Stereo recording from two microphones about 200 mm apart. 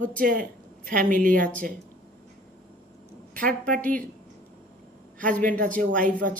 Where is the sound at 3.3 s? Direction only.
45° right (ahead or behind).